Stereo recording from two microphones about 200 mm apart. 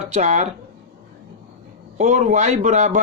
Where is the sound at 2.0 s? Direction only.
40° right (ahead or behind).